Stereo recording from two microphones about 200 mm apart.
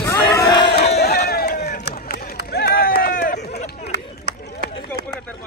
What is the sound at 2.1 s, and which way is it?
Run, 50° left (ahead or behind).